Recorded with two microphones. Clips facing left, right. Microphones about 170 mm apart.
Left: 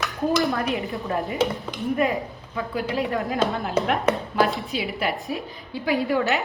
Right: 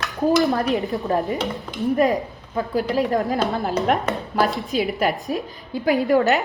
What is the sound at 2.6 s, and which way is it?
A woman's voice, 40° right (ahead or behind).